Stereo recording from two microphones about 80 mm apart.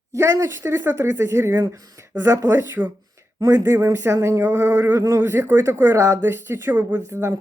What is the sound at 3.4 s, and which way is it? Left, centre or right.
Speech, right.